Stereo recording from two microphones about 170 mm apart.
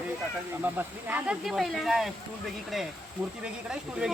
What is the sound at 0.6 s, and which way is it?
Speech, 10° right (ahead or behind).